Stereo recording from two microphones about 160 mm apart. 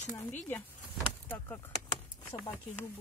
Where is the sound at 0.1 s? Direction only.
10° left (ahead or behind).